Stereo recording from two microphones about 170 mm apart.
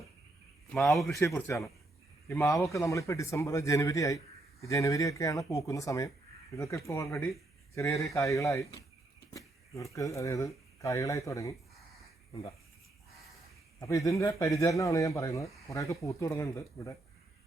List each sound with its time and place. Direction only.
0.7 s a man's voice: centre (ahead or behind)
1.5 s speech: 20° left (ahead or behind)
13.7 s speech: 20° left (ahead or behind)